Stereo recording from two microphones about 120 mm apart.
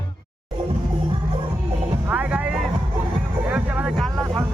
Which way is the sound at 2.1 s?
10° right (ahead or behind).